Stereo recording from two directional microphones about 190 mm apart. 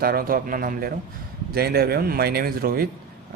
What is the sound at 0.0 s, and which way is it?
Speech, 50° right (ahead or behind).